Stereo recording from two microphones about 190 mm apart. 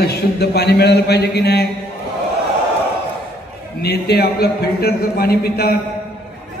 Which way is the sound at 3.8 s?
55° left (ahead or behind).